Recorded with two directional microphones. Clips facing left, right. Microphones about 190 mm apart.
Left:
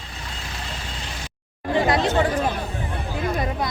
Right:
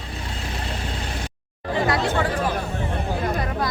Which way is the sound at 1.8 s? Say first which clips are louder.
Left 2 dB; 20° left (ahead or behind).